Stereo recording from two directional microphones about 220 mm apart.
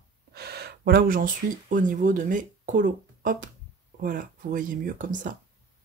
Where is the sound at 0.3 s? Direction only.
45° right (ahead or behind).